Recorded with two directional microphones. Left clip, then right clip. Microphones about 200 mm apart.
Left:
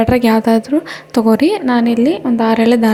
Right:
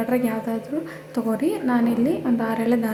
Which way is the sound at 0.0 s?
45° left (ahead or behind).